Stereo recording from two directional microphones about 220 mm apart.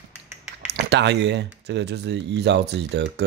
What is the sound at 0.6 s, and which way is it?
Speech, 50° right (ahead or behind).